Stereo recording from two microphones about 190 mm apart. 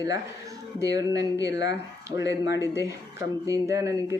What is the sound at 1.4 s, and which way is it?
Speech, 65° left (ahead or behind).